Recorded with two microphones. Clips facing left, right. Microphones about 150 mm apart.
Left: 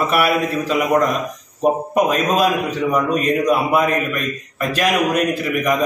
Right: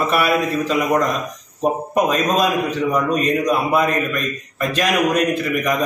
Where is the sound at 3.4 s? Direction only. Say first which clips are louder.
Left 1 dB; 5° left (ahead or behind).